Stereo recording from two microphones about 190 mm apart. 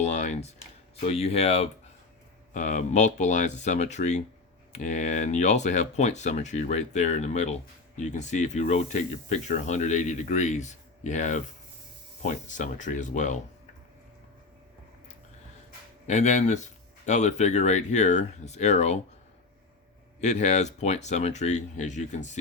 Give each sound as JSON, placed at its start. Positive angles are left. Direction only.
{"t": 0.0, "sound": "computer keyboard", "side_deg": 40}
{"t": 1.0, "sound": "speech", "side_deg": 35}
{"t": 16.0, "sound": "speech", "side_deg": 40}
{"t": 20.2, "sound": "speech", "side_deg": 40}